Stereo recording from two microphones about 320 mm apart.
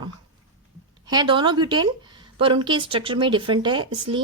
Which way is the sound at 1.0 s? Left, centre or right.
Centre.